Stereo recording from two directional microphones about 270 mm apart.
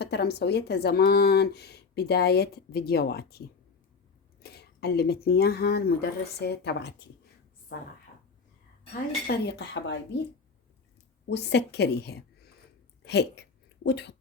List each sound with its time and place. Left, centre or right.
0.0 s speech: left
4.4 s speech: left
9.2 s speech: left
11.3 s speech: left